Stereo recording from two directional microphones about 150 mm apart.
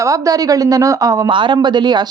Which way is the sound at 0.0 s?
20° right (ahead or behind).